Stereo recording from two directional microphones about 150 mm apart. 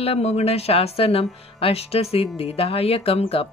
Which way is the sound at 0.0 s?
45° left (ahead or behind).